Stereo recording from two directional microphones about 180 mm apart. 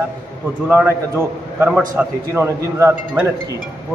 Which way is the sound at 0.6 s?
10° right (ahead or behind).